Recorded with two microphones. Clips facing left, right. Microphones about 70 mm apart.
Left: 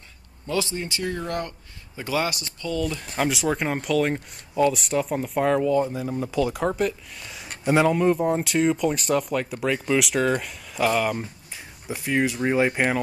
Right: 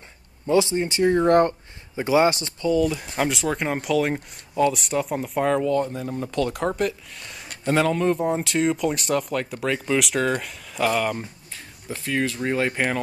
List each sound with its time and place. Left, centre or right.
0.5 s speech: right
1.2 s speech: right
2.0 s speech: right
2.7 s speech: centre
3.3 s speech: centre
8.2 s speech: centre